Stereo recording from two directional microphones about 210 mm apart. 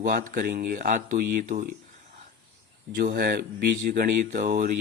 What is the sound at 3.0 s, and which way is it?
Speech, 45° right (ahead or behind).